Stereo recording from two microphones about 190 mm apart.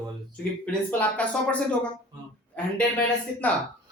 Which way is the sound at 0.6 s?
5° left (ahead or behind).